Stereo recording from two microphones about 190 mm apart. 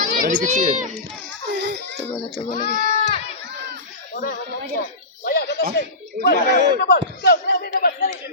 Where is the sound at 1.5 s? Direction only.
60° right (ahead or behind).